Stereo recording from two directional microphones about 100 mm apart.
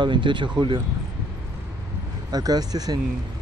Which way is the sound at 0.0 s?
50° right (ahead or behind).